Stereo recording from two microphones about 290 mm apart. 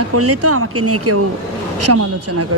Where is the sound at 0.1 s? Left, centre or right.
Right.